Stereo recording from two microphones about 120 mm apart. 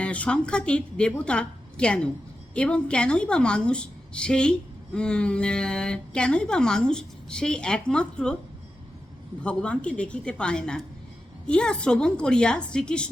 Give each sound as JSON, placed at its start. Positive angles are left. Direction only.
{"t": 0.0, "sound": "speech", "side_deg": 10}
{"t": 9.4, "sound": "speech", "side_deg": 10}